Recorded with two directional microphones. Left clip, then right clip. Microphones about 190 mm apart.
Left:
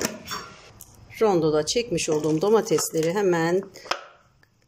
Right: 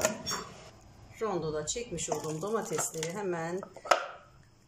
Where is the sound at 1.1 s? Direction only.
45° left (ahead or behind).